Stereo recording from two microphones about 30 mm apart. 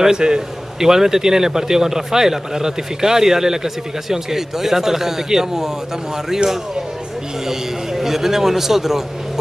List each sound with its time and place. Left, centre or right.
0.2 s a man's voice: right
0.7 s a man's voice: centre